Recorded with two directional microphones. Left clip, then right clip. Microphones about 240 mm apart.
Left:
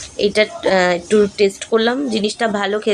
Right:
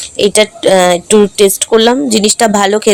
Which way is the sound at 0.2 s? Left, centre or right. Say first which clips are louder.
Right 6 dB; right.